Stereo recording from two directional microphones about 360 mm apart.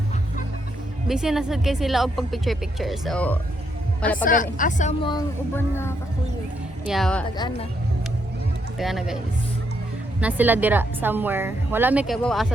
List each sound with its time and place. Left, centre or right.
1.0 s a woman's voice: centre
4.2 s a woman's voice: left
8.8 s a woman's voice: centre
10.2 s a woman's voice: centre